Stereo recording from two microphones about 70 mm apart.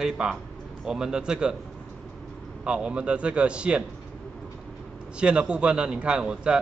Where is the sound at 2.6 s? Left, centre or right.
Centre.